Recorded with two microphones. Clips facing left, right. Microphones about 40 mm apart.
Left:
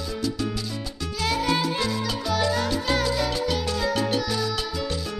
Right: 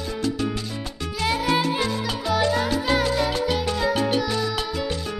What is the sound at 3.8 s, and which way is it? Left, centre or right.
Salsa music, centre.